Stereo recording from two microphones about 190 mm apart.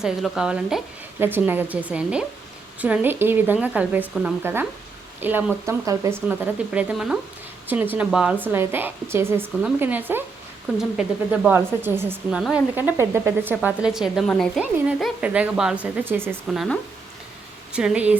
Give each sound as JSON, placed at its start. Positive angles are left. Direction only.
{"t": 0.0, "sound": "speech", "side_deg": -5}
{"t": 6.2, "sound": "speech", "side_deg": -5}
{"t": 12.4, "sound": "speech", "side_deg": 0}
{"t": 12.7, "sound": "speech", "side_deg": -10}
{"t": 16.6, "sound": "speech", "side_deg": 5}